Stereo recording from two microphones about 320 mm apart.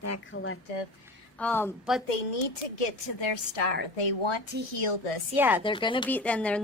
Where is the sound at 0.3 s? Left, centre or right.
Left.